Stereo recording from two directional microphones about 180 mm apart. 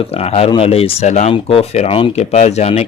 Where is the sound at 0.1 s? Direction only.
35° left (ahead or behind).